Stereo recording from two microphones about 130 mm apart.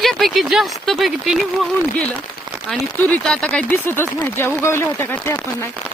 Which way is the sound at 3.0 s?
10° left (ahead or behind).